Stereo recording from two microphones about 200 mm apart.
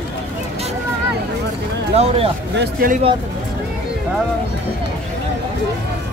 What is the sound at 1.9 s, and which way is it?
Speech, 30° right (ahead or behind).